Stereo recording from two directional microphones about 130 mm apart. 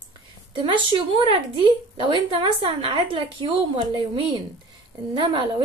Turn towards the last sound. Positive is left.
turn(degrees=-35)  # may be behind; listen again after turning